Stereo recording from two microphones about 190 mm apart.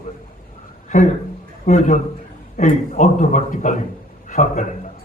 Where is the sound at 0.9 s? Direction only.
40° left (ahead or behind).